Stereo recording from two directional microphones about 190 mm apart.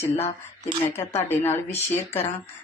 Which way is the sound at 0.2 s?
35° left (ahead or behind).